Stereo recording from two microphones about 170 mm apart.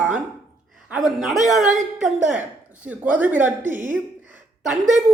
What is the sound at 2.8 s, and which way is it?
Speech, 10° right (ahead or behind).